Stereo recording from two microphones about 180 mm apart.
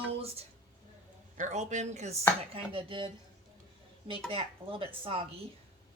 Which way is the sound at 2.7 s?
30° right (ahead or behind).